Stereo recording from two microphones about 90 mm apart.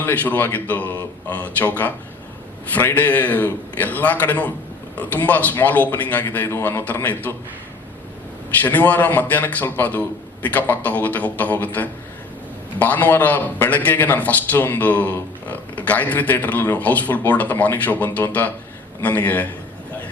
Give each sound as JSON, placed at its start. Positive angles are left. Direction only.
{"t": 0.0, "sound": "a man's voice", "side_deg": 20}
{"t": 8.6, "sound": "a man's voice", "side_deg": 20}